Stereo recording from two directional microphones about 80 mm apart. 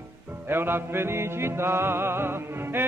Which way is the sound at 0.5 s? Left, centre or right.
Right.